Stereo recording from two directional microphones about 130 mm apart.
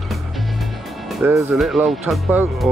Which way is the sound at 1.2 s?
20° right (ahead or behind).